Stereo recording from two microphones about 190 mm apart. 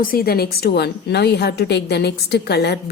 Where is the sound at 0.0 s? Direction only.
50° left (ahead or behind).